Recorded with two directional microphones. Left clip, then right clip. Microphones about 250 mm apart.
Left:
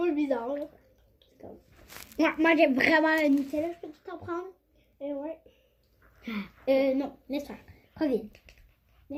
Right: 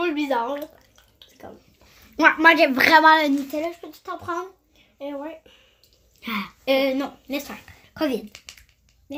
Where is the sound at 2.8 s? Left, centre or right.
Right.